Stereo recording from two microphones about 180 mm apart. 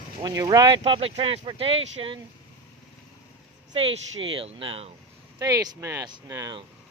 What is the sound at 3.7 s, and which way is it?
Speech, 30° right (ahead or behind).